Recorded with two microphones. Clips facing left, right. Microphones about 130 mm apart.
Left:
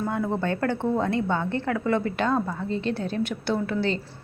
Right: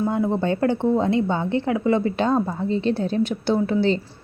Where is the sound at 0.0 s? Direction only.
20° right (ahead or behind).